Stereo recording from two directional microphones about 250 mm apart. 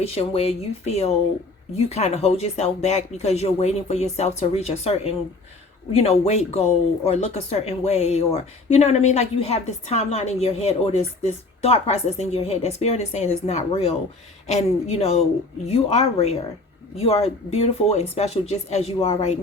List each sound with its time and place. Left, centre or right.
0.0 s speech: left